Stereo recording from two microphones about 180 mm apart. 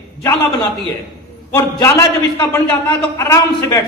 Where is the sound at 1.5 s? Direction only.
15° left (ahead or behind).